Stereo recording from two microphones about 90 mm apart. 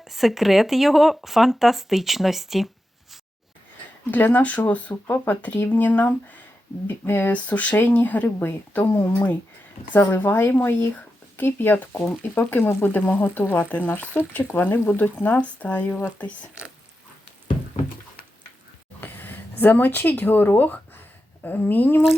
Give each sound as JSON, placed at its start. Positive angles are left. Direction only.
{"t": 0.0, "sound": "speech", "side_deg": 0}
{"t": 4.1, "sound": "speech", "side_deg": 20}
{"t": 18.9, "sound": "a sound", "side_deg": 20}
{"t": 21.4, "sound": "speech", "side_deg": 20}